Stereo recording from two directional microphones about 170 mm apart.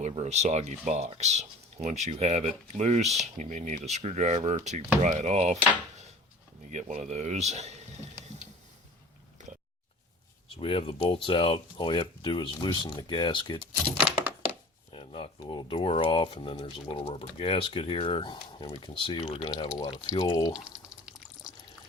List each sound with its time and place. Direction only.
0.1 s speech: 40° right (ahead or behind)
6.7 s speech: 45° right (ahead or behind)
9.4 s a sound: 45° right (ahead or behind)
10.6 s speech: 30° left (ahead or behind)
13.9 s coin: 5° right (ahead or behind)
14.9 s speech: 35° left (ahead or behind)
19.5 s speech: 20° left (ahead or behind)
20.7 s drip: 5° right (ahead or behind)